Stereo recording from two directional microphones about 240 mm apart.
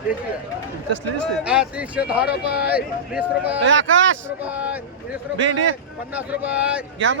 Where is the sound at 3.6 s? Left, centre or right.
Right.